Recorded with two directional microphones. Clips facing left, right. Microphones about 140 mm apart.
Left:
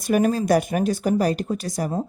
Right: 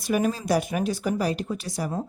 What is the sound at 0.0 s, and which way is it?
Speech, 50° left (ahead or behind).